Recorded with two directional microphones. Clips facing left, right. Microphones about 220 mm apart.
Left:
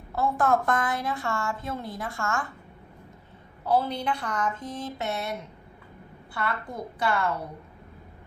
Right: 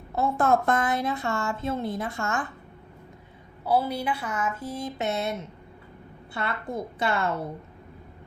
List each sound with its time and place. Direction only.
0.1 s a woman's voice: 25° right (ahead or behind)
3.7 s a woman's voice: 10° right (ahead or behind)
6.3 s a woman's voice: 25° right (ahead or behind)